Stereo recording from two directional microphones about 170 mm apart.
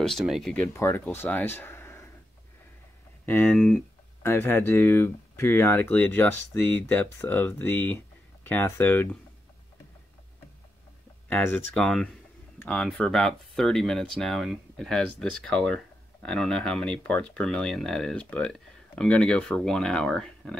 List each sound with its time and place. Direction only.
0.0 s speech: centre (ahead or behind)
0.7 s speech: 15° left (ahead or behind)
3.3 s speech: 10° left (ahead or behind)
4.2 s speech: 15° left (ahead or behind)
11.2 s speech: 10° left (ahead or behind)